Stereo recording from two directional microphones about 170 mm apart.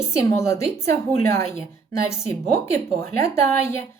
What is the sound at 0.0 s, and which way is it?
A woman's voice, 15° left (ahead or behind).